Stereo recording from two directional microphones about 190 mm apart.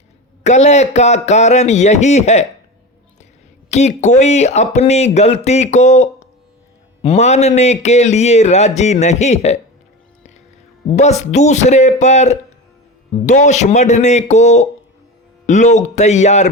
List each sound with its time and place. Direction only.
0.4 s speech: 35° left (ahead or behind)
3.7 s speech: 35° left (ahead or behind)
10.9 s speech: 35° left (ahead or behind)